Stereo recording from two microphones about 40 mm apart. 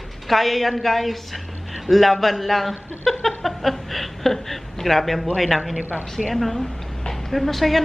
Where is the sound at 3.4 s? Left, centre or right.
Centre.